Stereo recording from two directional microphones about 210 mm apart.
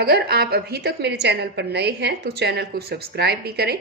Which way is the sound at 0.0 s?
50° right (ahead or behind).